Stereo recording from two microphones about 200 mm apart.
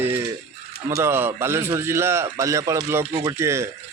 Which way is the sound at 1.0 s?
10° right (ahead or behind).